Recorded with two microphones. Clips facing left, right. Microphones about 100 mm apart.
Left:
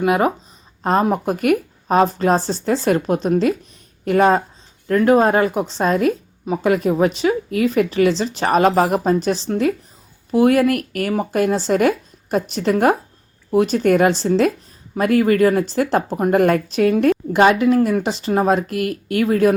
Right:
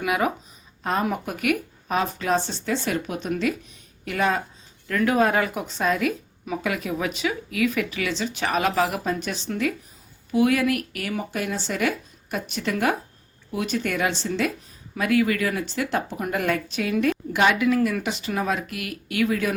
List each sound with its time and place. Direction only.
0.0 s speech: 40° left (ahead or behind)